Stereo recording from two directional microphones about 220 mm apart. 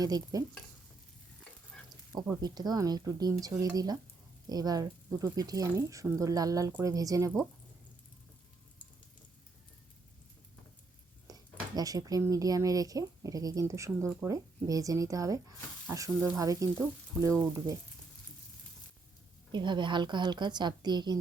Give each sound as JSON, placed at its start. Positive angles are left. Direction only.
{"t": 0.0, "sound": "speech", "side_deg": -15}
{"t": 2.1, "sound": "speech", "side_deg": -15}
{"t": 11.3, "sound": "speech", "side_deg": -15}
{"t": 19.5, "sound": "a woman's voice", "side_deg": -20}